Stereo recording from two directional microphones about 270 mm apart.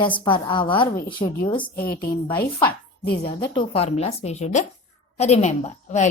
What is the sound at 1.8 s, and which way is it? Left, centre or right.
A woman's voice, left.